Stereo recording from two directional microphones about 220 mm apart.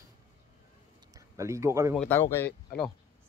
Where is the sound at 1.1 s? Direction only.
15° right (ahead or behind).